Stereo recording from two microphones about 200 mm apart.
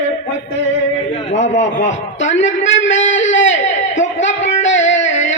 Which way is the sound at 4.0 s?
65° left (ahead or behind).